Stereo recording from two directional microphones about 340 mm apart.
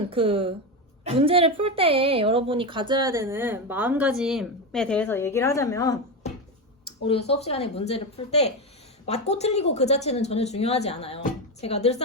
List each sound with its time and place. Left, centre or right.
0.1 s a woman's voice: centre